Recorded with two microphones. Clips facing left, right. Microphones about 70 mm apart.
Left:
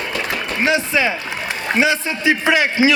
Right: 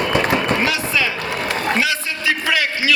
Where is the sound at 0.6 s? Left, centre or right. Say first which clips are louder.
Left 3 dB; left.